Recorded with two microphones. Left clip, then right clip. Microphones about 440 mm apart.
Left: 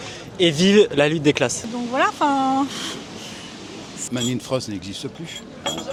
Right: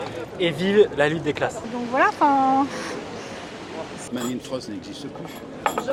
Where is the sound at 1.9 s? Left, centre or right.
Left.